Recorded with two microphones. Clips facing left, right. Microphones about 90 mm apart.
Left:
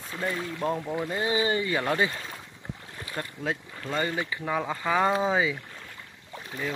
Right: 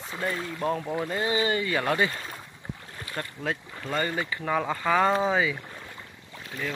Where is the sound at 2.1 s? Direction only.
5° right (ahead or behind).